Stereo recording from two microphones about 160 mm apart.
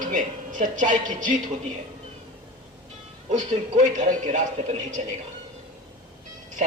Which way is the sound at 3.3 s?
50° right (ahead or behind).